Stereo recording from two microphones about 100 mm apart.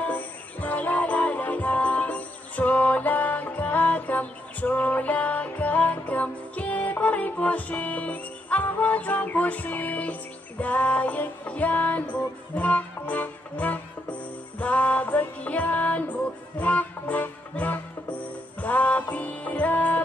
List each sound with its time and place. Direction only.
0.0 s music: 15° left (ahead or behind)